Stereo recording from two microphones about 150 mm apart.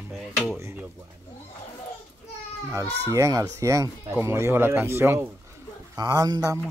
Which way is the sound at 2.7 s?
20° right (ahead or behind).